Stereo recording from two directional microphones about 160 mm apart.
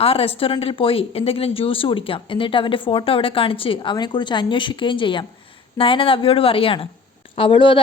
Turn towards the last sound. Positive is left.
turn(degrees=35)  # may be behind; listen again after turning